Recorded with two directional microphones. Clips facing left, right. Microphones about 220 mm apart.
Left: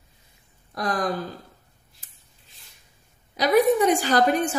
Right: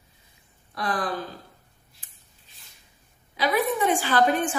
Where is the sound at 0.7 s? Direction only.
40° left (ahead or behind).